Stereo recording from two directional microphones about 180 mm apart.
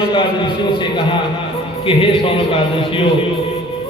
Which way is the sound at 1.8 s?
30° left (ahead or behind).